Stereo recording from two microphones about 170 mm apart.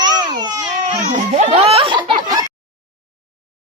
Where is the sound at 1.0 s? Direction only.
40° right (ahead or behind); by 2.4 s 25° right (ahead or behind).